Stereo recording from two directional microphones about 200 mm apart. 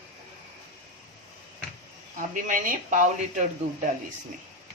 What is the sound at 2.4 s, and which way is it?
Speech, 40° right (ahead or behind).